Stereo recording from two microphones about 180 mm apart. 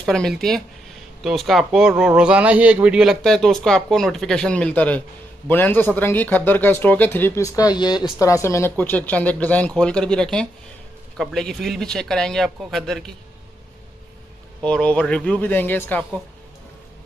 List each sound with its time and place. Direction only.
0.0 s a man's voice: centre (ahead or behind)
14.6 s speech: 5° left (ahead or behind)